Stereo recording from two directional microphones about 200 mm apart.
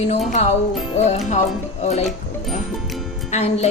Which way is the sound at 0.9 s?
35° left (ahead or behind).